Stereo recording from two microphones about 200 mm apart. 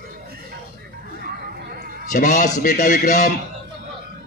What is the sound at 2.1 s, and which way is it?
A man's voice, 40° left (ahead or behind).